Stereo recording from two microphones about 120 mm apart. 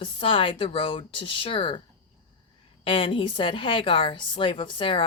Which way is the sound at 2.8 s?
45° left (ahead or behind).